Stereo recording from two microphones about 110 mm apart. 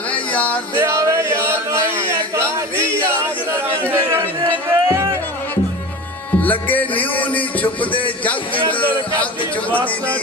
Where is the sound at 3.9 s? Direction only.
25° right (ahead or behind).